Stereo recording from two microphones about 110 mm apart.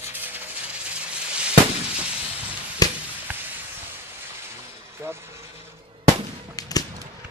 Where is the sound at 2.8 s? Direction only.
35° left (ahead or behind).